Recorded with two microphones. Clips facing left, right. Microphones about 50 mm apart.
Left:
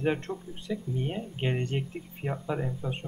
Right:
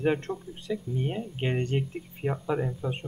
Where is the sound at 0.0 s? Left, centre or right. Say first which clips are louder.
Right 2 dB; centre.